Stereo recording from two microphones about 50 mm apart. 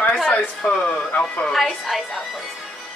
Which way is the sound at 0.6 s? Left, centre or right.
Left.